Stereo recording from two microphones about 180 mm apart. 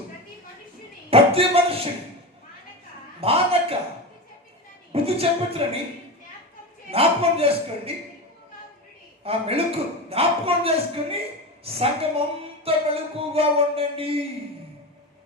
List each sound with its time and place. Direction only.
1.1 s a man's voice: 30° right (ahead or behind)
3.2 s a man's voice: 30° right (ahead or behind)
4.9 s a man's voice: 35° right (ahead or behind)
6.9 s a man's voice: 35° right (ahead or behind)
9.2 s a man's voice: 35° right (ahead or behind)